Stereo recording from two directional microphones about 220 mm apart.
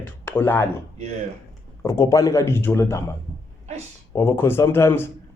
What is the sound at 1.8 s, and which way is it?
A man's voice, 15° left (ahead or behind).